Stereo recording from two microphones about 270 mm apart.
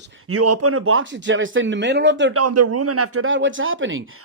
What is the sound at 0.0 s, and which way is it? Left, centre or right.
A man's voice, right.